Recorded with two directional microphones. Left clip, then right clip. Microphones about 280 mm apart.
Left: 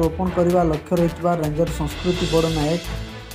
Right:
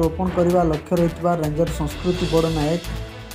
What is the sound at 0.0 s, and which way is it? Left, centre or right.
Speech, centre.